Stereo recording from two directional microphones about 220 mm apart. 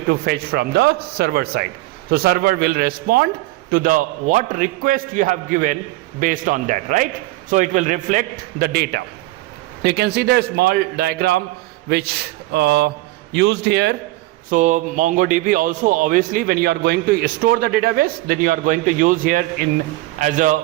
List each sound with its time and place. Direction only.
0.1 s a man's voice: 45° right (ahead or behind)
14.5 s a man's voice: 35° right (ahead or behind)